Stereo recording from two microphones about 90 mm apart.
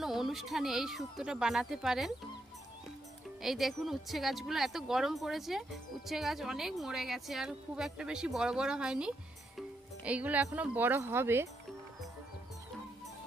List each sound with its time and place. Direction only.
0.0 s speech: 5° right (ahead or behind)
3.4 s speech: centre (ahead or behind); by 11.4 s 25° right (ahead or behind)